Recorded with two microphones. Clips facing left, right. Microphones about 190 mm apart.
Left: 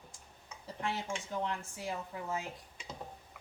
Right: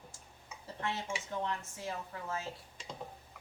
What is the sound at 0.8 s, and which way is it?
Speech, 15° left (ahead or behind).